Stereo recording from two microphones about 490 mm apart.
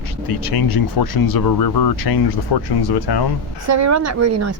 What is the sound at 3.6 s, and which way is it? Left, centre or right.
Speech, right.